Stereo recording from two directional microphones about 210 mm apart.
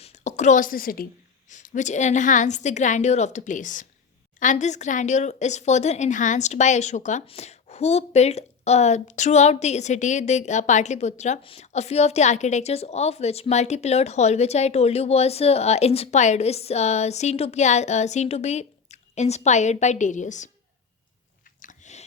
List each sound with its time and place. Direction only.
0.0 s a woman's voice: 35° left (ahead or behind)
21.6 s biting: 35° left (ahead or behind)